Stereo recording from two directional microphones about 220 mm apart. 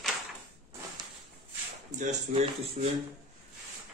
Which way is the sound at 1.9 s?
30° right (ahead or behind).